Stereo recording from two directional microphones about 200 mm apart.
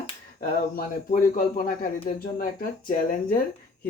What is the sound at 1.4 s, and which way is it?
Speech, 45° left (ahead or behind).